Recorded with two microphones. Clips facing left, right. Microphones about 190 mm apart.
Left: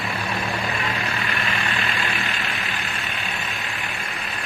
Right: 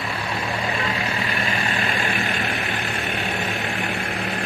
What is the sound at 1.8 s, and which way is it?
Vehicle, 40° right (ahead or behind).